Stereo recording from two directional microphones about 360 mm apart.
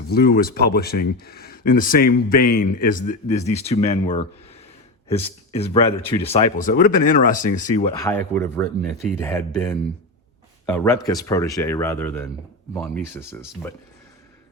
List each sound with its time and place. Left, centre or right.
0.1 s speech: left; by 13.7 s centre